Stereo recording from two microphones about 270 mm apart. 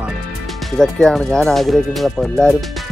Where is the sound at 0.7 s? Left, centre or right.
Centre.